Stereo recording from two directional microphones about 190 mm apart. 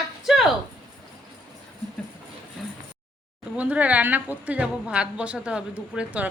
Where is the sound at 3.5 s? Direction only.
5° right (ahead or behind).